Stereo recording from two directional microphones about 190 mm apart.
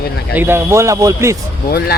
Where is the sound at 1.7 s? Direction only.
55° left (ahead or behind).